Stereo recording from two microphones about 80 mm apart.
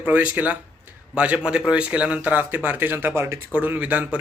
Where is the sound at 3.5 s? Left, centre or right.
Right.